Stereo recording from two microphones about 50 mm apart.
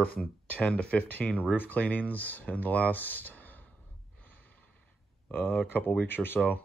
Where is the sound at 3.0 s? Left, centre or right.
Left.